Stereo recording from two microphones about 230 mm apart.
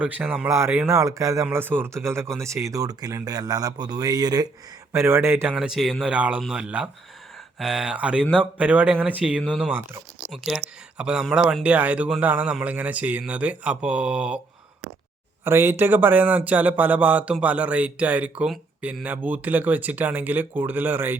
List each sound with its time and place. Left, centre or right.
0.0 s speech: centre
15.4 s speech: centre